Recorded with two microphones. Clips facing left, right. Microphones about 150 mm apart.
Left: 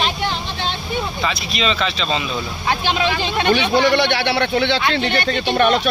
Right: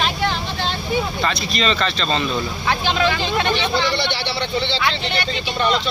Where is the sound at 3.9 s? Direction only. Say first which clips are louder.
Left 6 dB; 60° left (ahead or behind).